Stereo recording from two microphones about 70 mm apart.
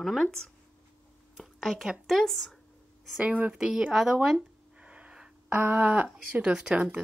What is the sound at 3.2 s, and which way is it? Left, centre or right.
Speech, centre.